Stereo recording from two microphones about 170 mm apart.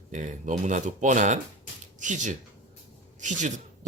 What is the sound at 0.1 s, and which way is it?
Speech, 45° right (ahead or behind).